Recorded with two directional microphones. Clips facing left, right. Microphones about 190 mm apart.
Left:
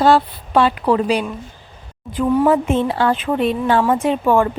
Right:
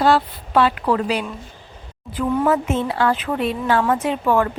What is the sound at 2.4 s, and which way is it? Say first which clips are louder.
A woman's voice: left 4 dB; 30° left (ahead or behind).